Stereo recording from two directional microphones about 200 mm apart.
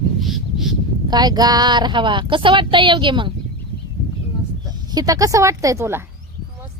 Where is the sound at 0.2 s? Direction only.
Centre (ahead or behind).